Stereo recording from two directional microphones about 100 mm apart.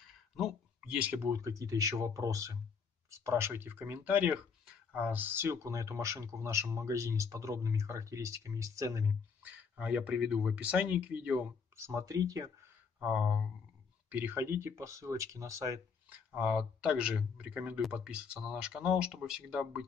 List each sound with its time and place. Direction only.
0.4 s a sound: 15° right (ahead or behind)
1.1 s speech: 30° right (ahead or behind)
9.4 s speech: 15° right (ahead or behind)
11.7 s speech: 30° right (ahead or behind)
13.0 s speech: 10° right (ahead or behind); by 15.8 s 35° right (ahead or behind)
16.3 s speech: 5° right (ahead or behind)